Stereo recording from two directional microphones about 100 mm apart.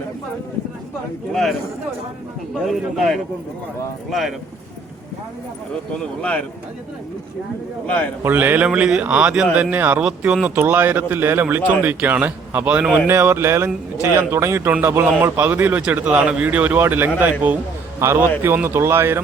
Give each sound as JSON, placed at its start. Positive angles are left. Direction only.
{"t": 1.3, "sound": "speech", "side_deg": 5}
{"t": 2.6, "sound": "speech", "side_deg": 0}
{"t": 6.0, "sound": "speech", "side_deg": 10}
{"t": 7.9, "sound": "speech", "side_deg": 15}
{"t": 8.2, "sound": "speech", "side_deg": -20}